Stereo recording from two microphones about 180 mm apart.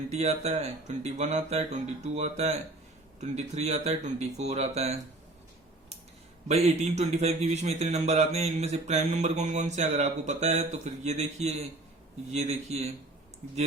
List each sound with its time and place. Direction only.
0.1 s a man's voice: 40° right (ahead or behind)
6.5 s a man's voice: 40° right (ahead or behind)